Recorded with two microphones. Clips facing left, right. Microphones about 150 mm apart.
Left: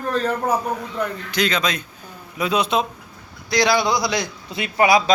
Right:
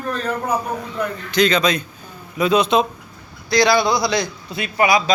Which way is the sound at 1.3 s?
5° left (ahead or behind).